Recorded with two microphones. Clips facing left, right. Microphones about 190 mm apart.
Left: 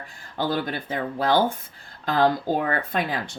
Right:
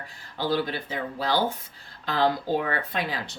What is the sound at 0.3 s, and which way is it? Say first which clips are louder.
Speech: left 1 dB; 50° left (ahead or behind).